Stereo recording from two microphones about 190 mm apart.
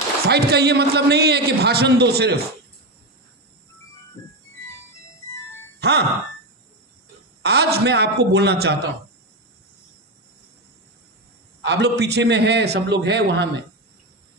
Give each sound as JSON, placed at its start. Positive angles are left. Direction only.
{"t": 0.3, "sound": "a man's voice", "side_deg": -60}
{"t": 5.8, "sound": "music", "side_deg": -60}
{"t": 7.4, "sound": "a man's voice", "side_deg": -60}
{"t": 11.6, "sound": "a man's voice", "side_deg": -60}